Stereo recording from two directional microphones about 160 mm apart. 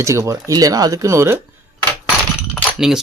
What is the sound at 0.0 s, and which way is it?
Speech, 20° right (ahead or behind).